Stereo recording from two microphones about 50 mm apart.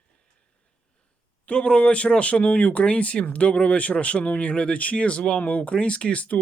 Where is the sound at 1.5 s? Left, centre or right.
Left.